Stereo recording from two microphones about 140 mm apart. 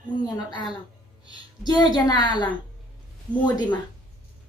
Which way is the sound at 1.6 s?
30° left (ahead or behind).